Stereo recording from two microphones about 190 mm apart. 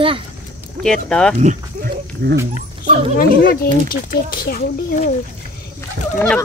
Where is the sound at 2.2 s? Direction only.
55° right (ahead or behind).